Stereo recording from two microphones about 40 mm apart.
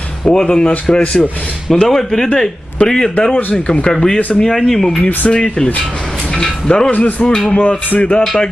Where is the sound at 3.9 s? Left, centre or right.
Centre.